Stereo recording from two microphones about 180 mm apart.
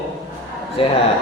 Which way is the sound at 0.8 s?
30° left (ahead or behind).